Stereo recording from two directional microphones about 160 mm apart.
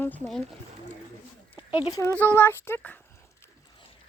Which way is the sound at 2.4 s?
15° left (ahead or behind).